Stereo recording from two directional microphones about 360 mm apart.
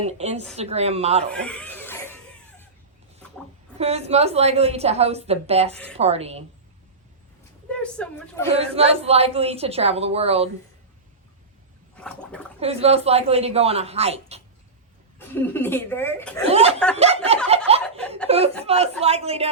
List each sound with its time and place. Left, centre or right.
0.0 s a woman's voice: centre
1.3 s music: centre
3.8 s a woman's voice: centre
7.7 s speech: centre
8.5 s a woman's voice: centre
11.9 s gargling: centre
12.5 s a woman's voice: centre
15.2 s speech: centre
16.5 s a woman's voice: centre
17.5 s chuckle: centre
17.8 s laughter: centre
18.3 s a woman's voice: centre